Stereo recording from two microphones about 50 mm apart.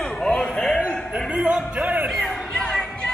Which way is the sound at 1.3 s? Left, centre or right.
Right.